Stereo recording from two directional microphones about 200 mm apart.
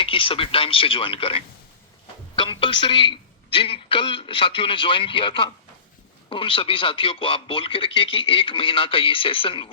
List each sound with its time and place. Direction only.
0.0 s a man's voice: 25° left (ahead or behind)